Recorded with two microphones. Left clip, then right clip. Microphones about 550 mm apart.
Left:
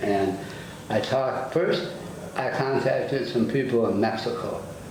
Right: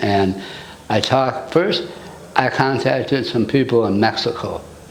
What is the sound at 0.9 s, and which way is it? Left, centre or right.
Speech, right.